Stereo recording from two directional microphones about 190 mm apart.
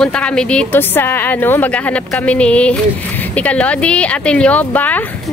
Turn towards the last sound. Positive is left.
turn(degrees=10)  # may be behind; listen again after turning